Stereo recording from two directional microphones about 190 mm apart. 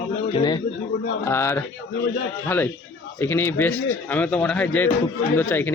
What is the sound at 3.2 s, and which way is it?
Speech, 10° left (ahead or behind).